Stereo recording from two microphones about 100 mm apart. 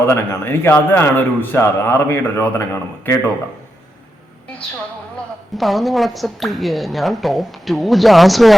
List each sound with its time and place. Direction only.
0.0 s a man's voice: 25° left (ahead or behind)
5.5 s a woman's voice: centre (ahead or behind)